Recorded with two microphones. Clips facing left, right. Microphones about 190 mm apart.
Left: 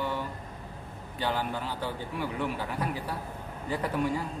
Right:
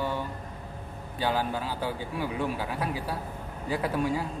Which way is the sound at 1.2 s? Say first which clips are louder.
Right 3 dB; 10° right (ahead or behind).